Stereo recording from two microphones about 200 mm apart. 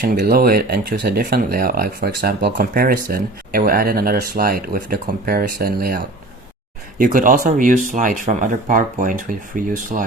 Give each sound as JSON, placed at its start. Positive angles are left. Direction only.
{"t": 0.0, "sound": "speech", "side_deg": -50}
{"t": 7.0, "sound": "speech", "side_deg": -45}